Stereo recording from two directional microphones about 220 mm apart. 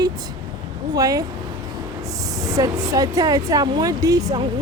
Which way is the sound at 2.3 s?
15° right (ahead or behind).